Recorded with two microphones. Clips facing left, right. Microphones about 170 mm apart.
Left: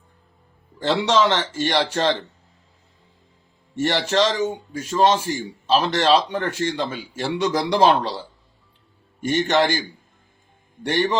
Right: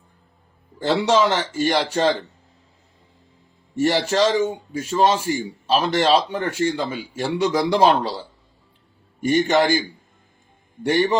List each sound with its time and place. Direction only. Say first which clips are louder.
0.8 s a man's voice: right 1 dB; 10° right (ahead or behind)
3.8 s a man's voice: right 2 dB; 10° right (ahead or behind)
9.2 s a man's voice: right 2 dB; 10° right (ahead or behind)
10.8 s a man's voice: right 3 dB; 10° right (ahead or behind)